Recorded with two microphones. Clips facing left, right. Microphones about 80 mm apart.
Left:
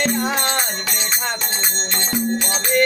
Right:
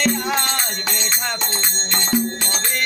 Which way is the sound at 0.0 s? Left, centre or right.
Left.